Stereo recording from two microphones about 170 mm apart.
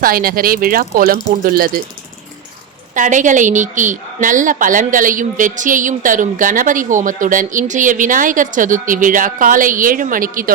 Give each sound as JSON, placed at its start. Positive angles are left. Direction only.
{"t": 0.0, "sound": "speech", "side_deg": -60}
{"t": 2.9, "sound": "a woman's voice", "side_deg": -50}